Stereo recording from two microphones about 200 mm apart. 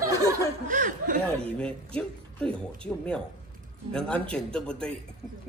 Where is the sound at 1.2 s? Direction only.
5° left (ahead or behind).